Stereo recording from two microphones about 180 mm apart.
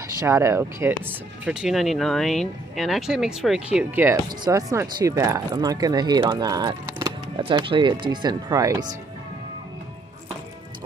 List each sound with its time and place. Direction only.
0.2 s speech: 15° right (ahead or behind)